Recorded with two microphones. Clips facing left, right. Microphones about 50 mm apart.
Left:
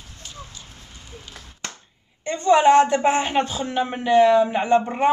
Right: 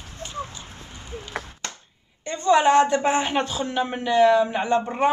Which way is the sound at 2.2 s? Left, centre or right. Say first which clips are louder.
Left 2 dB; centre.